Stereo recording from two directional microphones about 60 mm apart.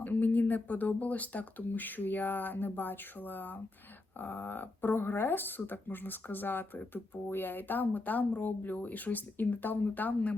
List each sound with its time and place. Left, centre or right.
0.0 s speech: left